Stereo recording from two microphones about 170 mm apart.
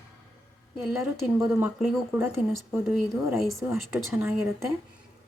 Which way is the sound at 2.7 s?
10° right (ahead or behind).